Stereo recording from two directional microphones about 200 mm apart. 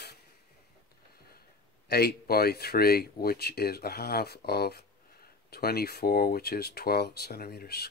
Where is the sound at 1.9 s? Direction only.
50° left (ahead or behind).